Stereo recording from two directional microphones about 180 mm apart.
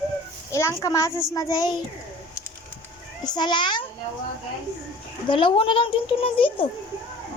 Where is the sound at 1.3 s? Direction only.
20° left (ahead or behind).